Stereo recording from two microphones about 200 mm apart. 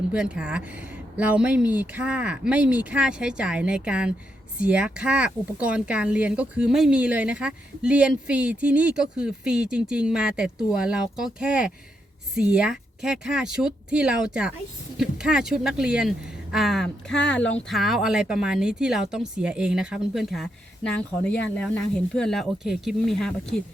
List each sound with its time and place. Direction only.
0.1 s speech: 5° right (ahead or behind)